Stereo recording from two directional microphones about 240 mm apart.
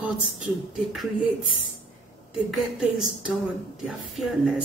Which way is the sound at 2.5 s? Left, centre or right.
Centre.